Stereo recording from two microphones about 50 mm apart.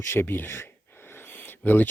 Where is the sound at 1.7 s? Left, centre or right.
Left.